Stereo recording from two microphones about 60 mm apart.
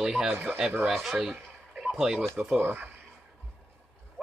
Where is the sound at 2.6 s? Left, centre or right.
Right.